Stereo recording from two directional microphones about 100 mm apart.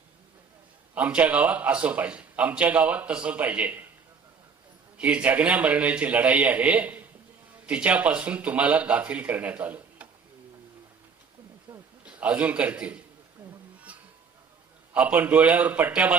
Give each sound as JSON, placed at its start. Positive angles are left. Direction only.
{"t": 0.9, "sound": "a man's voice", "side_deg": -15}
{"t": 4.9, "sound": "a man's voice", "side_deg": -10}
{"t": 11.7, "sound": "hiccup", "side_deg": -20}
{"t": 12.0, "sound": "a man's voice", "side_deg": -15}
{"t": 13.9, "sound": "music", "side_deg": -15}
{"t": 14.9, "sound": "a man's voice", "side_deg": -15}